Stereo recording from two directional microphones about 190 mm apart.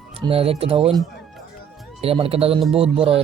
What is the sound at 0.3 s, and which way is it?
Speech, 30° right (ahead or behind).